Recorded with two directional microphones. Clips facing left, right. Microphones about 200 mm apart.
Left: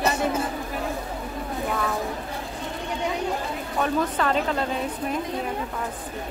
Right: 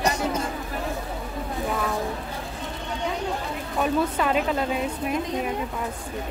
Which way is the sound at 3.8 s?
10° right (ahead or behind).